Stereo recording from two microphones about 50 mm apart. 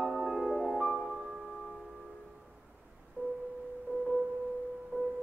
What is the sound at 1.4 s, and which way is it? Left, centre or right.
Music, centre.